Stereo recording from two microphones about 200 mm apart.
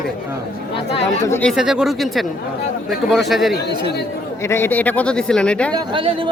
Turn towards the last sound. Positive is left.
turn(degrees=-25)  # may be behind; listen again after turning